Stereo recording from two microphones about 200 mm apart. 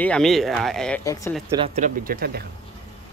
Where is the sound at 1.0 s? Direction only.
15° left (ahead or behind).